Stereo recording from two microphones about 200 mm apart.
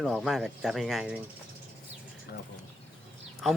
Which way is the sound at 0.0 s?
Centre (ahead or behind).